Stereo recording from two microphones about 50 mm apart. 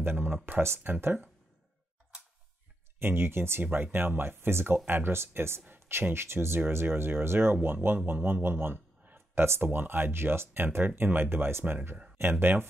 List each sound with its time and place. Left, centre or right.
0.0 s speech: right
0.6 s speech: right
3.0 s speech: right